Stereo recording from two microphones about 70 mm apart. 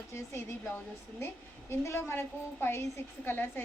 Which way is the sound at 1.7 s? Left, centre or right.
Left.